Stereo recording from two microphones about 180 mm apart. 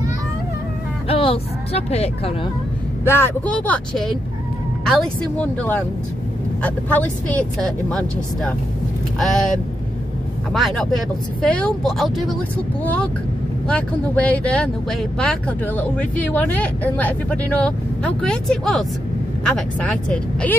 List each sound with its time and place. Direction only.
1.0 s speech: 30° left (ahead or behind)
3.1 s speech: 15° left (ahead or behind)